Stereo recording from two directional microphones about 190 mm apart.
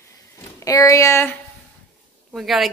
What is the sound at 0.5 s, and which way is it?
Speech, 15° left (ahead or behind).